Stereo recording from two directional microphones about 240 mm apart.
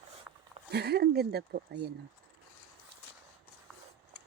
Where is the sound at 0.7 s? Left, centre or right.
Right.